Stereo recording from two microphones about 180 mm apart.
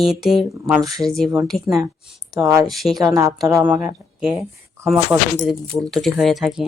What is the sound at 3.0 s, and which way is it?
Speech, 20° right (ahead or behind).